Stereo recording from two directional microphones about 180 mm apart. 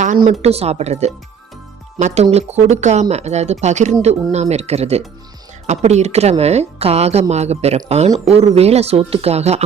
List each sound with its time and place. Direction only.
0.4 s a woman's voice: 35° right (ahead or behind)